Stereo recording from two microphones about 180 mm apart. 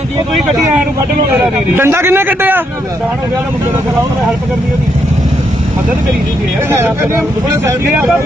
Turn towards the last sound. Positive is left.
turn(degrees=-15)  # may be behind; listen again after turning